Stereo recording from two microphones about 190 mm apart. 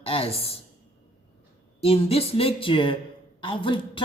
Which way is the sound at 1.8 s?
30° left (ahead or behind).